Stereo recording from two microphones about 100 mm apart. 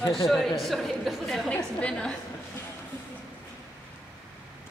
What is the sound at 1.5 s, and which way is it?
Speech, 10° left (ahead or behind).